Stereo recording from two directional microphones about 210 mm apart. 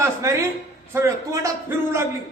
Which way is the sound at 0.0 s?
15° right (ahead or behind).